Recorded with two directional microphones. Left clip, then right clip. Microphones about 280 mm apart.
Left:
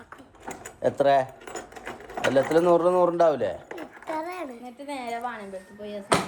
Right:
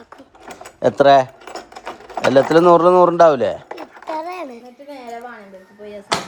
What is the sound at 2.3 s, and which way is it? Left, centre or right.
Speech, right.